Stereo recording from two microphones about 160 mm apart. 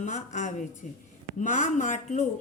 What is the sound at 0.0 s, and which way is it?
A woman's voice, 45° left (ahead or behind).